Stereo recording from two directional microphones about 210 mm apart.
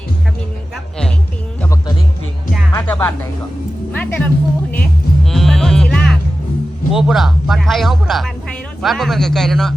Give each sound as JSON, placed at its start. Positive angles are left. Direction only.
{"t": 2.7, "sound": "music", "side_deg": 10}
{"t": 3.9, "sound": "speech", "side_deg": 5}
{"t": 4.7, "sound": "music", "side_deg": 5}
{"t": 6.9, "sound": "speech", "side_deg": 0}